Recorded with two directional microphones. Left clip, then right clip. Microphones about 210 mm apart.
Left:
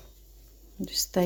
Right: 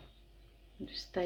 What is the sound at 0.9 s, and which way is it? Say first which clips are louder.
Heart murmur: left 11 dB; 55° left (ahead or behind).